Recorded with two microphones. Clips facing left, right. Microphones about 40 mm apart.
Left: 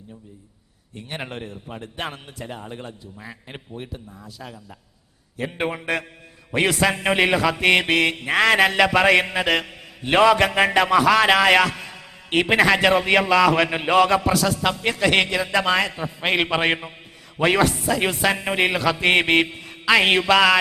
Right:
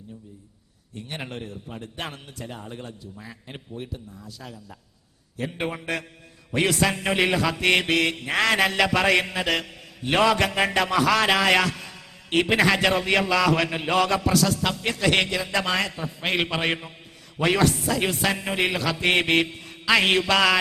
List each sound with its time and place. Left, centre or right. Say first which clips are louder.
0.9 s mantra: left 2 dB; centre